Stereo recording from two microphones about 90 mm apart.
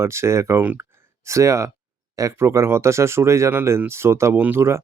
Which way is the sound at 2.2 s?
35° right (ahead or behind).